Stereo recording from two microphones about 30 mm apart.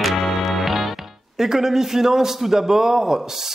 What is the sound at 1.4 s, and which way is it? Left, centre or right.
A man's voice, centre.